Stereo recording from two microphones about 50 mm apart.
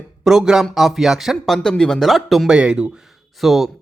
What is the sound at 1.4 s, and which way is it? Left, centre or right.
Speech, centre.